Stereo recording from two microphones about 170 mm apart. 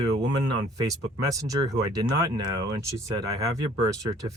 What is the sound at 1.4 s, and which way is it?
Speech, 20° right (ahead or behind).